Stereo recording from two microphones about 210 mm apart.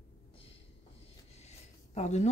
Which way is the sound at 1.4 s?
30° left (ahead or behind).